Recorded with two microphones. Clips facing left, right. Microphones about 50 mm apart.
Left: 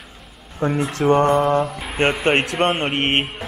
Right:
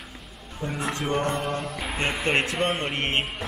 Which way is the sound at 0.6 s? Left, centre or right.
Left.